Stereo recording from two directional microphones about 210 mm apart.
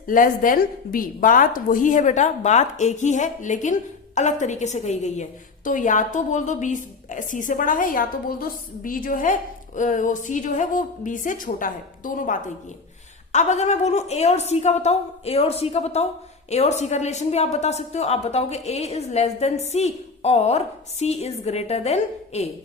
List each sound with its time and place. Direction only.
0.1 s a woman's voice: 40° left (ahead or behind)